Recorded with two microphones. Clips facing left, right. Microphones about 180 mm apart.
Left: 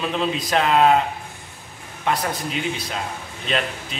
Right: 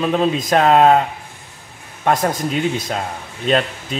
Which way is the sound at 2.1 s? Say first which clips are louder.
Right 6 dB; 45° right (ahead or behind).